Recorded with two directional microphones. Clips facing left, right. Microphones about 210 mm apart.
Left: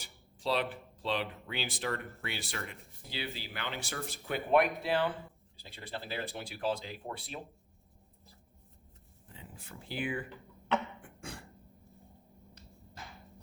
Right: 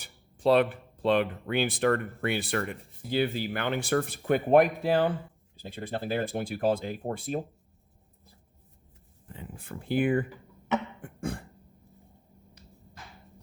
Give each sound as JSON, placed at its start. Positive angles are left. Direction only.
{"t": 0.0, "sound": "speech", "side_deg": -55}
{"t": 9.3, "sound": "speech", "side_deg": -55}
{"t": 11.0, "sound": "throat clearing", "side_deg": -55}